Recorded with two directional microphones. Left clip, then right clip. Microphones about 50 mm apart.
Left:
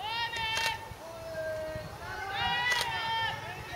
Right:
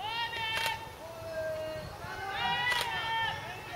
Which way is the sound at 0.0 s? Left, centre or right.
Centre.